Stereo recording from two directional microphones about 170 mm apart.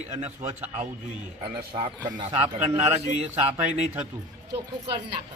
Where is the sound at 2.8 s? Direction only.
35° right (ahead or behind).